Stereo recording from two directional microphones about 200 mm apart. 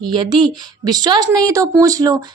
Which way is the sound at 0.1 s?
20° right (ahead or behind).